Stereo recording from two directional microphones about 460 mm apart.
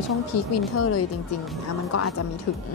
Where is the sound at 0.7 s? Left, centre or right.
Left.